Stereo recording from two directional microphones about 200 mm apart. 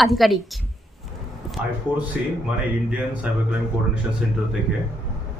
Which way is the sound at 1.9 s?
20° left (ahead or behind).